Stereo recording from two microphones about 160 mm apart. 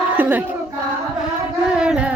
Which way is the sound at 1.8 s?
5° right (ahead or behind).